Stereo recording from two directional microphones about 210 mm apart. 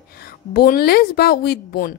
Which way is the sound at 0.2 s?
45° left (ahead or behind).